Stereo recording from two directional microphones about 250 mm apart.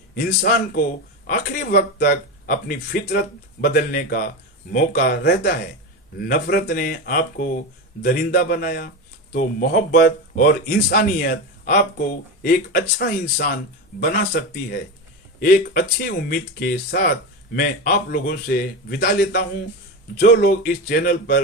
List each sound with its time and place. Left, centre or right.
0.2 s speech: left
15.4 s speech: left